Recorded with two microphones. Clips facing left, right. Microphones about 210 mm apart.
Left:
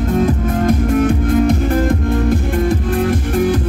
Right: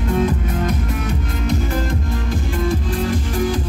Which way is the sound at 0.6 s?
50° left (ahead or behind).